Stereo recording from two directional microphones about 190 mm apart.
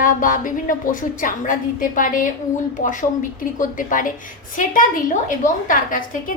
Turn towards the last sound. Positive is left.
turn(degrees=45)  # may be behind; listen again after turning